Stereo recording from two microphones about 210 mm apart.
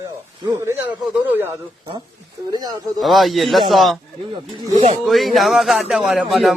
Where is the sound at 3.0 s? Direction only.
Centre (ahead or behind).